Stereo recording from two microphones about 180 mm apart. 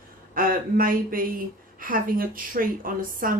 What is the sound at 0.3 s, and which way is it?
Speech, 50° right (ahead or behind).